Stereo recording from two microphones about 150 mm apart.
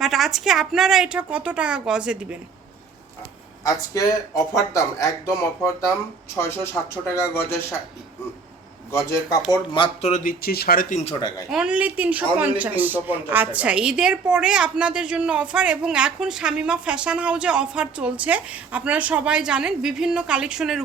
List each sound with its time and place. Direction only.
0.0 s a woman's voice: centre (ahead or behind)
3.6 s speech: 20° left (ahead or behind)
7.1 s speech: 15° left (ahead or behind)
8.9 s speech: 20° left (ahead or behind)
9.5 s speech: 30° left (ahead or behind)
10.0 s speech: 55° left (ahead or behind); by 10.9 s 80° left
11.2 s speech: 30° left (ahead or behind)
11.5 s a woman's voice: 5° right (ahead or behind)